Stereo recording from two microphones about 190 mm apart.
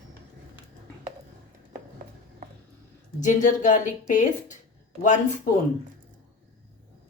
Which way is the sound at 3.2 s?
40° left (ahead or behind).